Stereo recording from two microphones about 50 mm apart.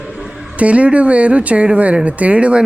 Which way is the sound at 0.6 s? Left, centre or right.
Right.